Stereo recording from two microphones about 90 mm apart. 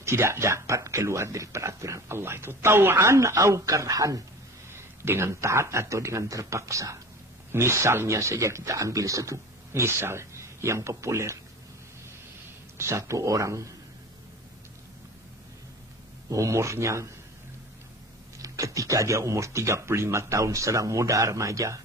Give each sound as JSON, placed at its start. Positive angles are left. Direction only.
{"t": 0.0, "sound": "speech", "side_deg": -30}
{"t": 4.6, "sound": "speech", "side_deg": -30}
{"t": 12.7, "sound": "speech", "side_deg": -30}
{"t": 16.3, "sound": "speech", "side_deg": -35}
{"t": 18.4, "sound": "speech", "side_deg": -40}